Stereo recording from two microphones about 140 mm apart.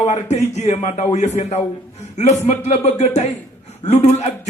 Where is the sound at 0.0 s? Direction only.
50° left (ahead or behind).